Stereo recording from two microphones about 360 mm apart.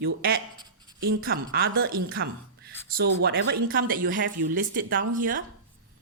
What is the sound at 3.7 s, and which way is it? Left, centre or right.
A woman's voice, right.